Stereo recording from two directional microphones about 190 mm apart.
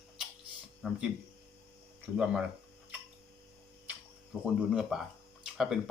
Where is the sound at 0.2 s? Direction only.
5° right (ahead or behind).